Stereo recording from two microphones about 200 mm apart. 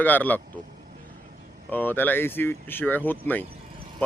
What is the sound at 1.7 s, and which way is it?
Speech, 10° left (ahead or behind).